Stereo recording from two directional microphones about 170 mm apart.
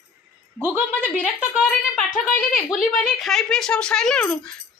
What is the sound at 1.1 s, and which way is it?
Speech, 50° left (ahead or behind).